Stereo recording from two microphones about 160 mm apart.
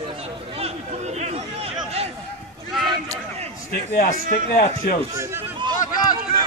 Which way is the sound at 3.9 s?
65° left (ahead or behind).